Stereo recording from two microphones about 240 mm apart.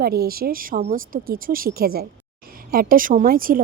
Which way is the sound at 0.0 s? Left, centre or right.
Right.